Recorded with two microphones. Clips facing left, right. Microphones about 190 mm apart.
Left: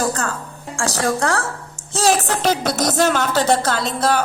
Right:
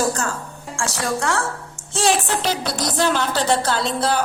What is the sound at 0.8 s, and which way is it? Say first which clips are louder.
A woman's voice: left 4 dB; 40° left (ahead or behind).